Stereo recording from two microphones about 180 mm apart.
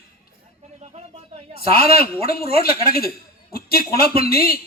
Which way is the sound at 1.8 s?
35° right (ahead or behind).